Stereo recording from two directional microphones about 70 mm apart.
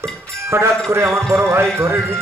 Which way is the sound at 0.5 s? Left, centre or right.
Right.